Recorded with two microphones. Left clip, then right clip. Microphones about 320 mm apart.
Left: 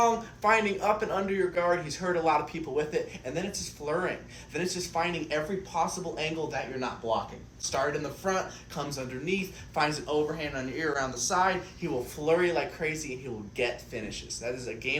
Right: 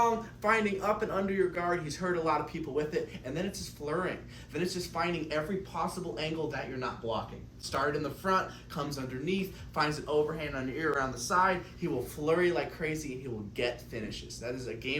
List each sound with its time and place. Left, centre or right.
0.0 s speech: centre
4.5 s speech: centre